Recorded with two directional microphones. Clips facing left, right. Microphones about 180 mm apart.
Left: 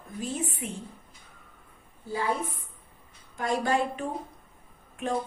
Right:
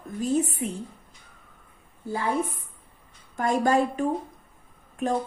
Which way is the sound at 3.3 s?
45° right (ahead or behind).